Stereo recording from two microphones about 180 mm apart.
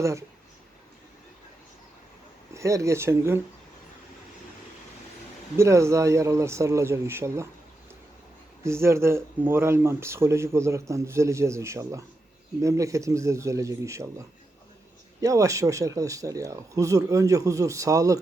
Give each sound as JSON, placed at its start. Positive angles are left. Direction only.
{"t": 0.0, "sound": "speech", "side_deg": -15}
{"t": 2.5, "sound": "speech", "side_deg": -15}
{"t": 5.5, "sound": "speech", "side_deg": -15}
{"t": 8.6, "sound": "speech", "side_deg": -15}